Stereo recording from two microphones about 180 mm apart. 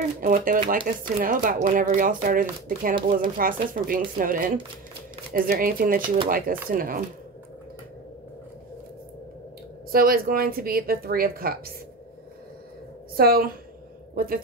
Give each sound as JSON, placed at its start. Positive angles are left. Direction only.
{"t": 0.2, "sound": "speech", "side_deg": -50}
{"t": 9.9, "sound": "speech", "side_deg": -55}
{"t": 13.1, "sound": "speech", "side_deg": -55}